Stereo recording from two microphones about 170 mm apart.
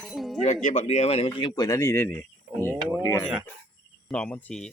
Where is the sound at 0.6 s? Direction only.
40° left (ahead or behind); by 2.7 s 10° left (ahead or behind).